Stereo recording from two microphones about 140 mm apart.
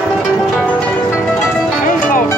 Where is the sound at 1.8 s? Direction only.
75° left (ahead or behind).